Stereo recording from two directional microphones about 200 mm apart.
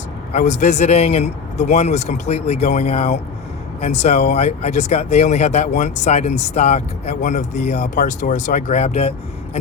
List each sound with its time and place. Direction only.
0.3 s speech: 35° left (ahead or behind)